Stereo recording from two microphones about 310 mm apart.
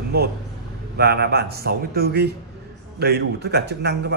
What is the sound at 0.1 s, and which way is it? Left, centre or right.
Speech, right.